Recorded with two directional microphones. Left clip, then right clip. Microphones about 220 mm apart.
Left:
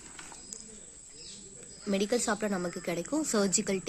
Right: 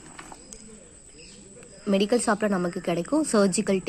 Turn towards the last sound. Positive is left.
turn(degrees=-15)  # may be behind; listen again after turning